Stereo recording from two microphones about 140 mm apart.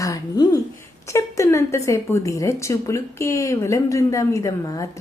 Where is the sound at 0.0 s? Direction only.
25° left (ahead or behind).